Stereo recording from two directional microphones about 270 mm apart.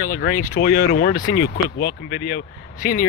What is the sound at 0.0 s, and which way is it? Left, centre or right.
Speech, left.